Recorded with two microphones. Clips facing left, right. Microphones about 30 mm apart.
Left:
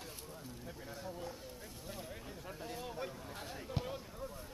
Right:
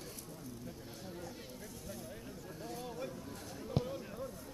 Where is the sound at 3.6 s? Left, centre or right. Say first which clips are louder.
Right 5 dB; centre.